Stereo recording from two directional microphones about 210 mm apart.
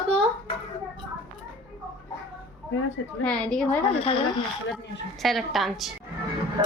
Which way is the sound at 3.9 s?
25° left (ahead or behind).